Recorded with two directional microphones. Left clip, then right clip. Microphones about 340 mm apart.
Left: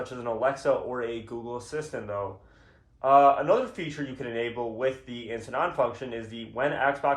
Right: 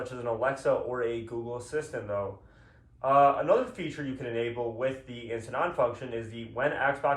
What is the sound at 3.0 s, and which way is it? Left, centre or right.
Speech, left.